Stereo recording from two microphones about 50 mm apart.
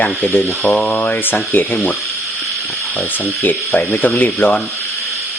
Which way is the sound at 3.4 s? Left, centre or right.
Left.